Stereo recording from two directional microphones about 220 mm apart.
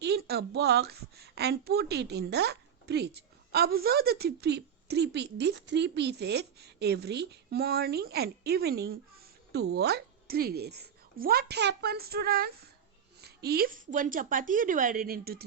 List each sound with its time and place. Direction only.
0.0 s a woman's voice: 45° right (ahead or behind)